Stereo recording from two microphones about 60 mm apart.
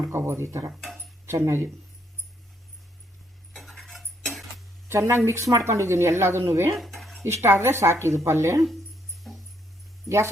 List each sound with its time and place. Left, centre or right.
0.1 s speech: right
0.7 s speech: centre
1.3 s speech: right
3.5 s tick-tock: centre
4.9 s speech: right
6.7 s dishes: centre
7.4 s speech: right
9.3 s dog: centre
10.1 s speech: centre